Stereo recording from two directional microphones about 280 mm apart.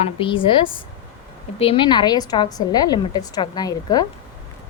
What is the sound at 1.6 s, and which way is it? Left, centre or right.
A woman's voice, centre.